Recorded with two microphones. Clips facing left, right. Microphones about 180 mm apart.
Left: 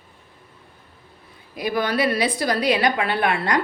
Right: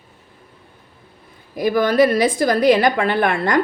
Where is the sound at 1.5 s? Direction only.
45° right (ahead or behind).